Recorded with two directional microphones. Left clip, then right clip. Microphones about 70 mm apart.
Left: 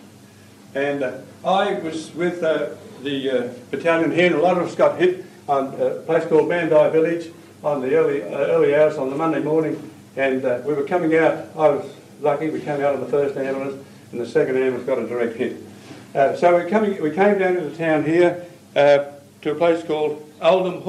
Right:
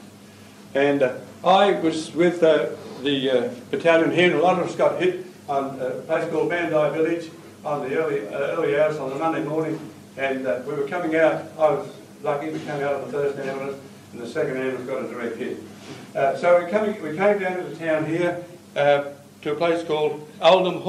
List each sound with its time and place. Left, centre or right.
0.7 s a man's voice: centre